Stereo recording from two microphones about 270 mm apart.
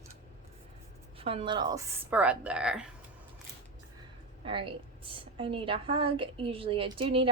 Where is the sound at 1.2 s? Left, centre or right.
Right; by 2.9 s centre.